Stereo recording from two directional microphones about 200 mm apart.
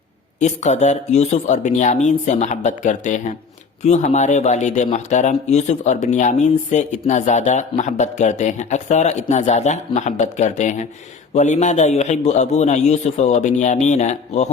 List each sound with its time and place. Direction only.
0.3 s speech: 35° left (ahead or behind)